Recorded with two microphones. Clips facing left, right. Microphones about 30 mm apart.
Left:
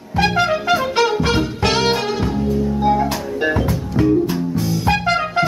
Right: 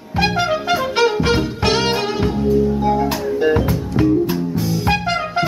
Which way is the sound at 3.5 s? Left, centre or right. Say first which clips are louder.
Right 2 dB; centre.